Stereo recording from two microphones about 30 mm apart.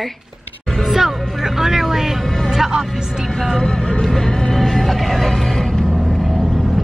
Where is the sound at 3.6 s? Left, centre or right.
Left.